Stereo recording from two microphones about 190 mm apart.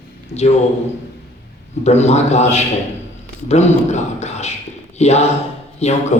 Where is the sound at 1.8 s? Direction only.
35° left (ahead or behind).